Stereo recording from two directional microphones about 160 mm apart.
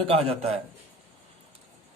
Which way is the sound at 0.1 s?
40° right (ahead or behind).